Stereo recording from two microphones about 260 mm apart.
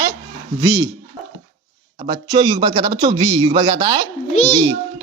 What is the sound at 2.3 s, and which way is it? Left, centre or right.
A man's voice, centre.